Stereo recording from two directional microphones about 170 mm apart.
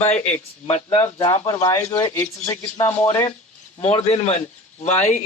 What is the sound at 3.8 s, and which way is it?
Speech, 40° left (ahead or behind).